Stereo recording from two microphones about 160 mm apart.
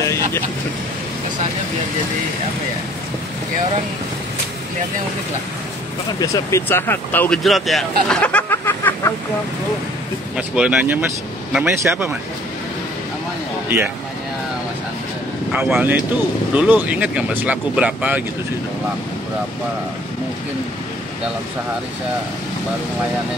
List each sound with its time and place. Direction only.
0.0 s vehicle: 15° left (ahead or behind)
6.1 s speech: 20° left (ahead or behind)
7.4 s speech: centre (ahead or behind)
10.3 s speech: 5° right (ahead or behind)
15.5 s speech: 10° right (ahead or behind)